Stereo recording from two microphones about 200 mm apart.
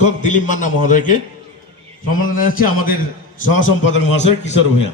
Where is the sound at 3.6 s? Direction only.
70° left (ahead or behind).